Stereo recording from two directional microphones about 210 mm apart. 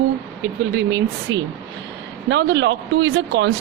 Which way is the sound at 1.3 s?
60° right (ahead or behind).